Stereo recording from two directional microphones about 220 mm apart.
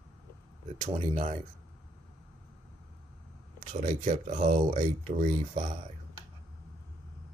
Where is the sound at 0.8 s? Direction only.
30° right (ahead or behind).